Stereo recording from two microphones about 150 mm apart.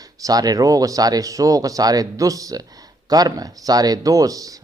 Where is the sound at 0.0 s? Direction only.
25° right (ahead or behind).